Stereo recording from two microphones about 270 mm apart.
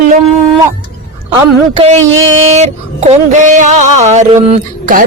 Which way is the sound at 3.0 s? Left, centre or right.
Right.